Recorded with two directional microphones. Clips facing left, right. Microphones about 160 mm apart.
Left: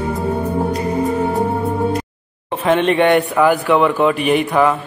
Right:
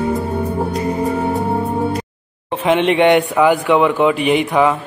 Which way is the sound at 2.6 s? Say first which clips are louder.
Right 1 dB; 15° right (ahead or behind).